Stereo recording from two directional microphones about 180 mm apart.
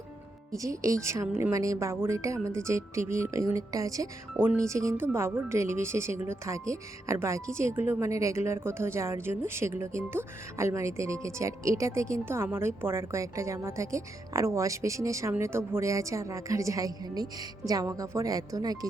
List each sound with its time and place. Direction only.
0.5 s speech: 20° right (ahead or behind)